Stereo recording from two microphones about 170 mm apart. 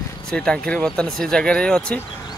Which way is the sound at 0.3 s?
5° left (ahead or behind).